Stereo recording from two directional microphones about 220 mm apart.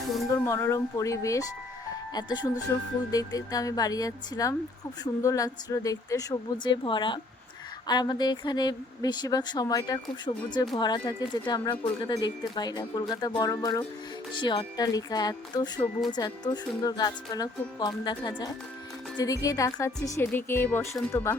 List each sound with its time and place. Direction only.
0.3 s a woman's voice: 15° left (ahead or behind)